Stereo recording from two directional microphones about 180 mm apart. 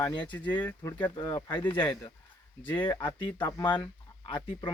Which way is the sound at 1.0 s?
25° left (ahead or behind).